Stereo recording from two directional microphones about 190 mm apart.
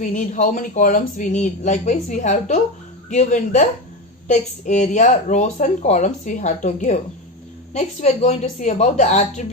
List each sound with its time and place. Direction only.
0.0 s speech: 40° left (ahead or behind)